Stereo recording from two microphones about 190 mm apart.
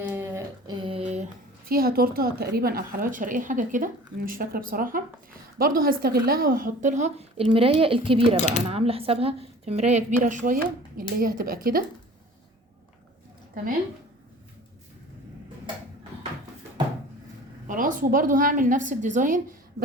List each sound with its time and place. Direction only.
0.1 s a sound: 10° right (ahead or behind)
0.8 s a woman's voice: 30° right (ahead or behind); by 11.8 s 50° right (ahead or behind)
17.7 s a woman's voice: 45° right (ahead or behind)